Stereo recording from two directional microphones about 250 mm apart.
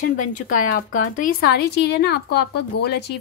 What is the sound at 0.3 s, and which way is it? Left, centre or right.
Speech, left.